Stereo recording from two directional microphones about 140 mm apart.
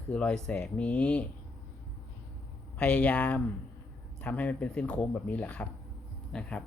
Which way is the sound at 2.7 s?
10° left (ahead or behind).